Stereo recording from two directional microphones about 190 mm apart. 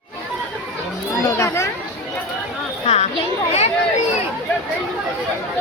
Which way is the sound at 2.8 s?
35° left (ahead or behind).